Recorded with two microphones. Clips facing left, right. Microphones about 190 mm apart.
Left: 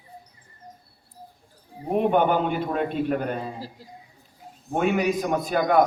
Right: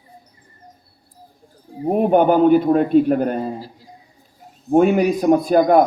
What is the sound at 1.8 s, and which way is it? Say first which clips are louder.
A man's voice: right 6 dB; 45° right (ahead or behind).